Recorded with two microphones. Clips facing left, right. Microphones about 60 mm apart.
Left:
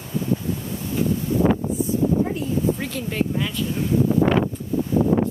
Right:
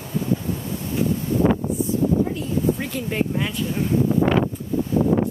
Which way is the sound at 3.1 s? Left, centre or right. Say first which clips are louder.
Even; centre.